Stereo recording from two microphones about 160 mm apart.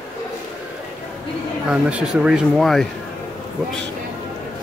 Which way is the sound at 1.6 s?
5° right (ahead or behind).